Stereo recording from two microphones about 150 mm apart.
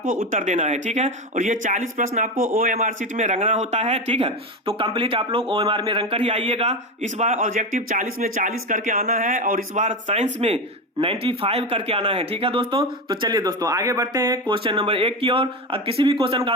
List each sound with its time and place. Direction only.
0.0 s speech: 60° right (ahead or behind)
2.7 s a man's voice: 55° right (ahead or behind); by 16.6 s 35° right (ahead or behind)